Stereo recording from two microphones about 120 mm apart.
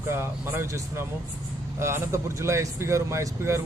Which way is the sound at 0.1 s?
20° right (ahead or behind).